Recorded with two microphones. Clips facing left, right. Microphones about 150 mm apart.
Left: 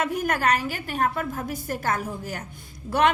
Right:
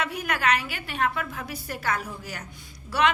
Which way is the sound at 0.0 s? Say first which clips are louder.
Left 3 dB; 45° left (ahead or behind).